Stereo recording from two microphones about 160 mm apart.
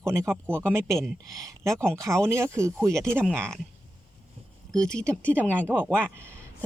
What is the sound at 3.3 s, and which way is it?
Speech, 5° left (ahead or behind).